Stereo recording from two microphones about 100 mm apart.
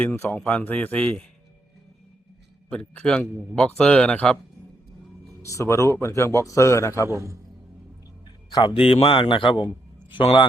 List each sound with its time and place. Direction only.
0.0 s a man's voice: 15° left (ahead or behind)
2.6 s a man's voice: 10° left (ahead or behind)
5.4 s a man's voice: 30° left (ahead or behind)
7.1 s a man's voice: 30° right (ahead or behind)
8.5 s a man's voice: 55° left (ahead or behind)
8.8 s speech: 80° left; by 9.6 s 55° left (ahead or behind)